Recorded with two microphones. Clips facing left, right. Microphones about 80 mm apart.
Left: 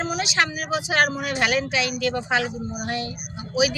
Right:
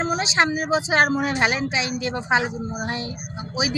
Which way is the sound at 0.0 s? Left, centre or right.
Right.